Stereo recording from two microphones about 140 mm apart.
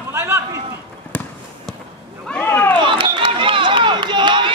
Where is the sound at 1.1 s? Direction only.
10° left (ahead or behind).